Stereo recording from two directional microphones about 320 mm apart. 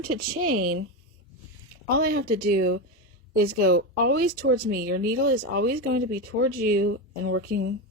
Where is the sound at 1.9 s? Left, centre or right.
Right.